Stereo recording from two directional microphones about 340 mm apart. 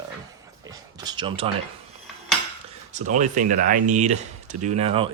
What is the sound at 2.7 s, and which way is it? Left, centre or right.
Speech, right.